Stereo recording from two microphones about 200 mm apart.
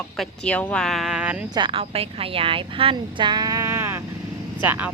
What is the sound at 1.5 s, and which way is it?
A woman's voice, 25° right (ahead or behind).